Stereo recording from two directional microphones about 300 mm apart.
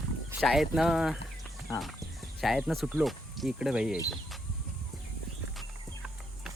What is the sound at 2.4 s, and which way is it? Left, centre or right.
Speech, centre.